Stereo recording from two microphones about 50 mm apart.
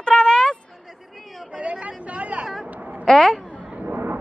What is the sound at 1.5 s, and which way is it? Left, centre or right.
Speech, right.